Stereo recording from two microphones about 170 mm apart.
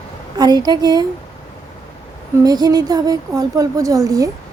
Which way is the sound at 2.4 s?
20° right (ahead or behind).